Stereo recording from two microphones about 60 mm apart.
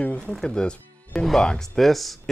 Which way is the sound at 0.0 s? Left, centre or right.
Left.